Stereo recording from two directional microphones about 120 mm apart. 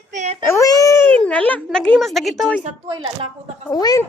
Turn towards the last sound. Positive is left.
turn(degrees=30)  # may be behind; listen again after turning